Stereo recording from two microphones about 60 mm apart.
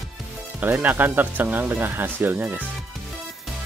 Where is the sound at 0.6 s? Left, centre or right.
Right.